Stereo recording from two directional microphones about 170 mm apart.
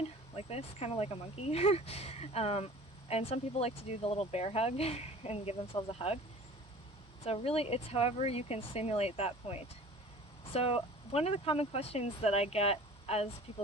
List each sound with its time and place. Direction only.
0.3 s speech: 35° left (ahead or behind)
7.3 s speech: 35° left (ahead or behind)